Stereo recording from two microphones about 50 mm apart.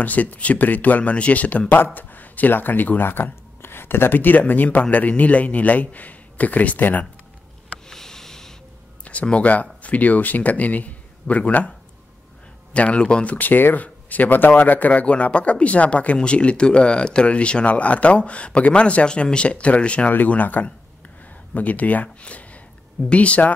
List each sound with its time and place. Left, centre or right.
0.0 s a man's voice: left
7.9 s sniff: centre
9.0 s speech: left
12.7 s a man's voice: left